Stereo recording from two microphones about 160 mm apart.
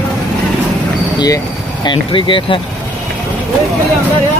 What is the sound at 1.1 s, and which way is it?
Speech, 25° left (ahead or behind).